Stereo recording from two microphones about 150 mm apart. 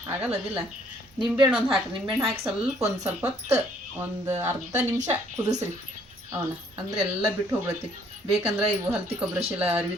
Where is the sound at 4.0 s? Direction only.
15° right (ahead or behind).